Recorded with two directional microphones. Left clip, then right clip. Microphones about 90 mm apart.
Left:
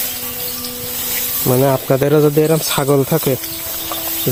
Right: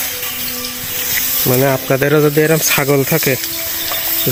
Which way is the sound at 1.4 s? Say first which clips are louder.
Left 1 dB; centre (ahead or behind).